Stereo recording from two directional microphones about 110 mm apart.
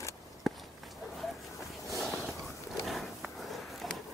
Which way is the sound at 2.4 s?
Centre (ahead or behind).